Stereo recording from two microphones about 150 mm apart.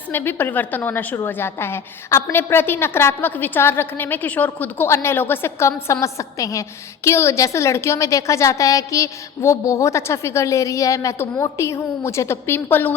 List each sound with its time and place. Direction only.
0.1 s a woman's voice: 15° left (ahead or behind)